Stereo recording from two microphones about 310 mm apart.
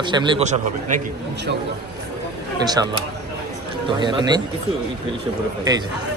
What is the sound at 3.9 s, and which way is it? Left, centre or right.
Speech, centre.